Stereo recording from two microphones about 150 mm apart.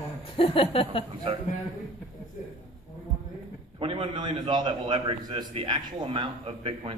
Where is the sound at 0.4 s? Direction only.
35° left (ahead or behind).